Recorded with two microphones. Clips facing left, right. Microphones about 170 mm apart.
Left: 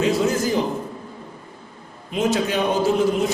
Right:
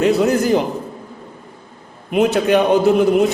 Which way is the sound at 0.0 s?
60° right (ahead or behind).